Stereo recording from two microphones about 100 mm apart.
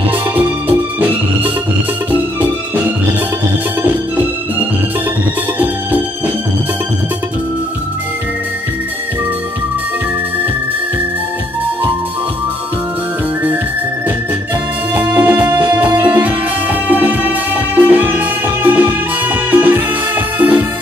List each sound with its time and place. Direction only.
0.4 s music: 20° right (ahead or behind)
5.6 s music: 15° right (ahead or behind)
15.0 s music: 15° right (ahead or behind)